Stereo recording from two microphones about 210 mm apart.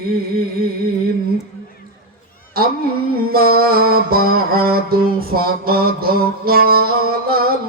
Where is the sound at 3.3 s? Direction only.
45° right (ahead or behind).